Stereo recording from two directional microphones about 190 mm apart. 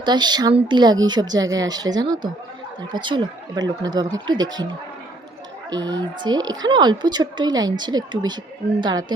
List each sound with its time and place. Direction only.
0.0 s a woman's voice: 25° right (ahead or behind)
5.7 s a woman's voice: 20° right (ahead or behind)